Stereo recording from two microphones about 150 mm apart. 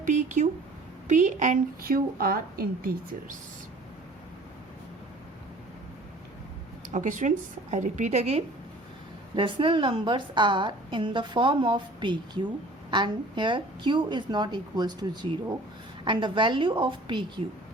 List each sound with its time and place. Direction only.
0.0 s a woman's voice: 55° right (ahead or behind); by 3.3 s 75° right (ahead or behind)
6.9 s a woman's voice: 60° right (ahead or behind)
9.3 s a woman's voice: 35° right (ahead or behind)